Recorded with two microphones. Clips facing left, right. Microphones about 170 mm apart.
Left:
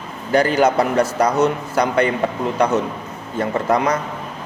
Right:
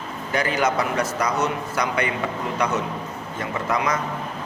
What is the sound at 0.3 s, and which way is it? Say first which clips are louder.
Speech: left 7 dB; 35° left (ahead or behind).